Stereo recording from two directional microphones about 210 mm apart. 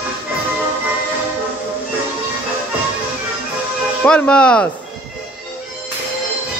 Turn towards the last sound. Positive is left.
turn(degrees=5)  # may be behind; listen again after turning